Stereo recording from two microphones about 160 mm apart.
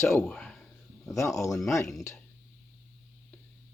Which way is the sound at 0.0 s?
15° left (ahead or behind).